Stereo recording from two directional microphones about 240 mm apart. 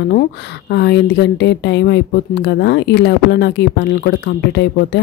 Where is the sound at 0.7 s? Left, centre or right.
Left.